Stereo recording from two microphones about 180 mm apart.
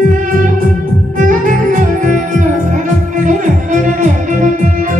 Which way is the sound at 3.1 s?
45° right (ahead or behind).